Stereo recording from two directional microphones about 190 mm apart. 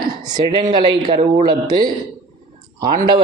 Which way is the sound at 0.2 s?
20° right (ahead or behind).